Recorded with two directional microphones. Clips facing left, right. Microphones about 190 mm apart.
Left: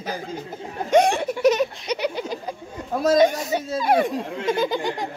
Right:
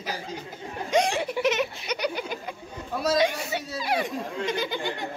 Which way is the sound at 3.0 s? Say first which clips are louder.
Left 6 dB; 50° left (ahead or behind).